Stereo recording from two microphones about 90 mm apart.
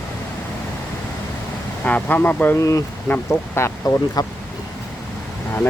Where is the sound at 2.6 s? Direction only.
40° left (ahead or behind).